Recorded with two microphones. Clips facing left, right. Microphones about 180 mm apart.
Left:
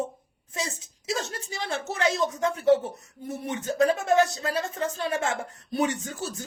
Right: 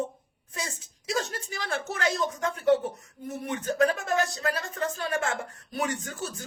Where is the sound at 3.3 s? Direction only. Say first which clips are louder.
Even; 25° left (ahead or behind).